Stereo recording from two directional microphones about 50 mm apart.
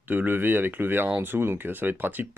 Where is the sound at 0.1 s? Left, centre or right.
Right.